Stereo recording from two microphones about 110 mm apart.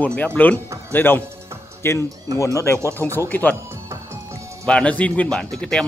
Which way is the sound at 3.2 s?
15° left (ahead or behind).